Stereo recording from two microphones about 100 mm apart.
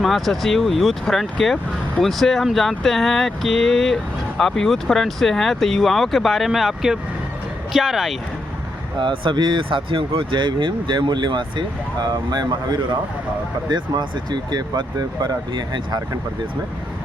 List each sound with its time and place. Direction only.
0.0 s speech: centre (ahead or behind)
9.0 s speech: 55° right (ahead or behind)